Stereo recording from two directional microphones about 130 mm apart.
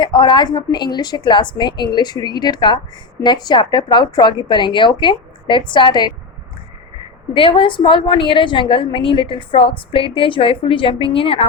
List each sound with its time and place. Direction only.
0.0 s a woman's voice: 35° left (ahead or behind)
7.3 s a woman's voice: 40° left (ahead or behind)